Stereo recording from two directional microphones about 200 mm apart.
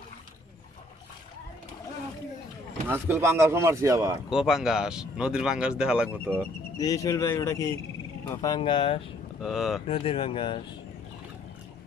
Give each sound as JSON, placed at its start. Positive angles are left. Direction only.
{"t": 2.9, "sound": "speech", "side_deg": -10}
{"t": 4.3, "sound": "speech", "side_deg": -5}
{"t": 6.8, "sound": "speech", "side_deg": 15}
{"t": 9.4, "sound": "speech", "side_deg": 0}
{"t": 9.8, "sound": "speech", "side_deg": 30}